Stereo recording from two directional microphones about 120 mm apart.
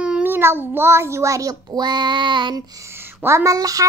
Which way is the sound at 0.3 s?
20° right (ahead or behind).